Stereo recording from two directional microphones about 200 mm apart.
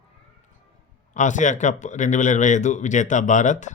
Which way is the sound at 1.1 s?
40° left (ahead or behind).